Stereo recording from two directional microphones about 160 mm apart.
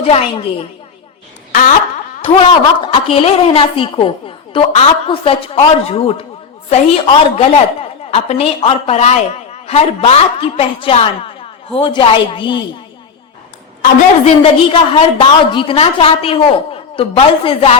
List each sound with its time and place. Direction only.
0.0 s a woman's voice: 35° left (ahead or behind)
2.2 s a woman's voice: 30° left (ahead or behind)
13.8 s a woman's voice: 35° left (ahead or behind)